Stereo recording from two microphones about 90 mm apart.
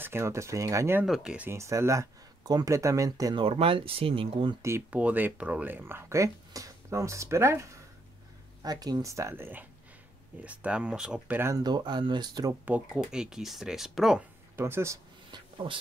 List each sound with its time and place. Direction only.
0.0 s speech: 30° right (ahead or behind)
1.0 s speech: centre (ahead or behind)
1.5 s speech: 30° right (ahead or behind)
3.3 s speech: 90° right
4.6 s speech: 30° right (ahead or behind)
4.9 s speech: 20° right (ahead or behind)
8.6 s speech: 45° right (ahead or behind)
9.3 s speech: 20° right (ahead or behind)
11.5 s speech: 50° right (ahead or behind)
12.6 s speech: 15° right (ahead or behind)
14.6 s speech: 30° right (ahead or behind)
15.3 s a sound: 75° right (ahead or behind)